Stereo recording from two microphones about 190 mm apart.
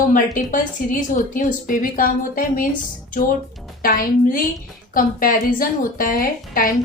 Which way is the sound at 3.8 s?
50° left (ahead or behind).